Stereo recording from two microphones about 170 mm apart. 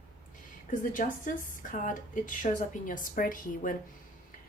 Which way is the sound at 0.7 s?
50° left (ahead or behind).